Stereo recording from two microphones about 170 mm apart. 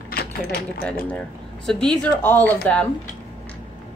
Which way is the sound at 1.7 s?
5° left (ahead or behind).